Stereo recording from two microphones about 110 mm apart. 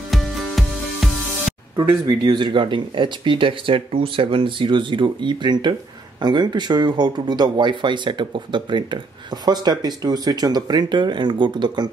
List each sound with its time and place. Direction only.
0.1 s music: centre (ahead or behind)
2.0 s speech: 40° right (ahead or behind)